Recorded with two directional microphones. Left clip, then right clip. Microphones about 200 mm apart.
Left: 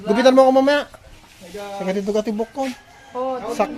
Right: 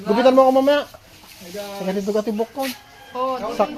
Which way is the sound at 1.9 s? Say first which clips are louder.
Left 1 dB; 10° left (ahead or behind).